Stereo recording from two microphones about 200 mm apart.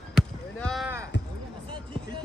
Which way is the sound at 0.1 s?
Centre (ahead or behind).